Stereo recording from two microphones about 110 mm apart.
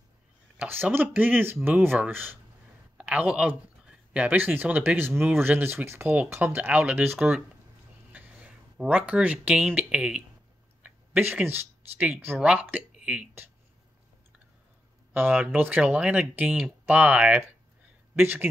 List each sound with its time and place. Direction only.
0.6 s speech: 15° right (ahead or behind)
15.1 s speech: 15° right (ahead or behind)